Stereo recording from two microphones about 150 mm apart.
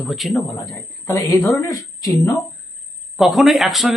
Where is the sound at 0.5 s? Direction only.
15° left (ahead or behind).